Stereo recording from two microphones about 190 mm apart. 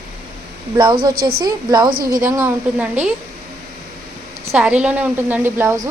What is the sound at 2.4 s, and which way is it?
Speech, 5° right (ahead or behind).